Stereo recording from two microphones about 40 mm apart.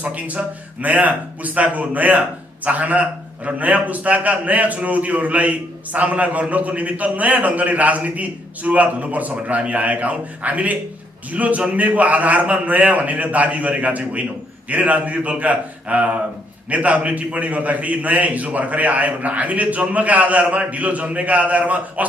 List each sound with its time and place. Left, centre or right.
0.0 s a man's voice: right